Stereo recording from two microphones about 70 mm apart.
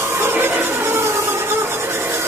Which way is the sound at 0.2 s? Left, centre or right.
Right.